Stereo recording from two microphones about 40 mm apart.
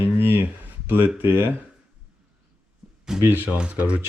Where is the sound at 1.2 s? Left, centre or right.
Right.